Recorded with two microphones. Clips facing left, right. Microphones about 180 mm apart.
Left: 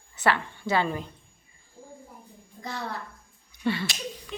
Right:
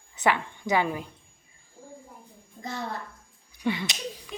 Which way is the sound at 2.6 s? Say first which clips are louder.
Right 1 dB; 20° right (ahead or behind).